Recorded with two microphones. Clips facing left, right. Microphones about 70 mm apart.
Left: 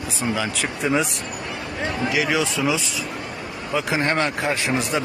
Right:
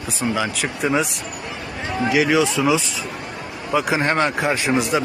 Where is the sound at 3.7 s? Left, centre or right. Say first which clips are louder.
Right 3 dB; centre.